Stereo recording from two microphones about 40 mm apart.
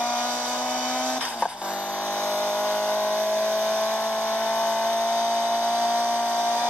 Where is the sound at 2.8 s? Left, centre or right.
Left.